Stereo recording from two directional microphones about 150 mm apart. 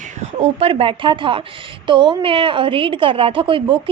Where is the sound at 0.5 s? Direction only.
40° right (ahead or behind).